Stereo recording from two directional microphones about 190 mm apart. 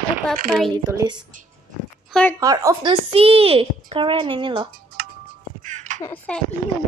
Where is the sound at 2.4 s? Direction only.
20° right (ahead or behind).